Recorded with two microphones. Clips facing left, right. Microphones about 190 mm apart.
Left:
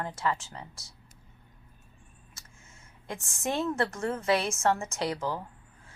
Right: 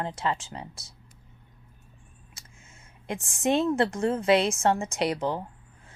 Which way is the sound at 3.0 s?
20° right (ahead or behind).